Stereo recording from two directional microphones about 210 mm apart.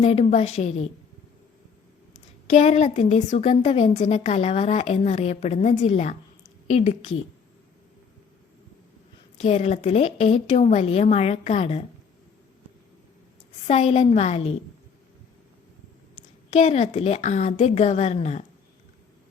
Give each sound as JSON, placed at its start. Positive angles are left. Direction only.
{"t": 0.0, "sound": "a woman's voice", "side_deg": 30}
{"t": 2.1, "sound": "a woman's voice", "side_deg": 35}
{"t": 9.4, "sound": "a woman's voice", "side_deg": 30}
{"t": 13.7, "sound": "a woman's voice", "side_deg": 30}
{"t": 16.1, "sound": "a woman's voice", "side_deg": 35}